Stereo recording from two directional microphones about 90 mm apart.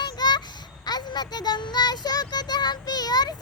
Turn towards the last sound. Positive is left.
turn(degrees=50)  # may be behind; listen again after turning